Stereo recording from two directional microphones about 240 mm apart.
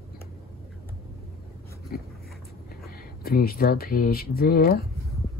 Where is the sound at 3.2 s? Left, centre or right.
Left.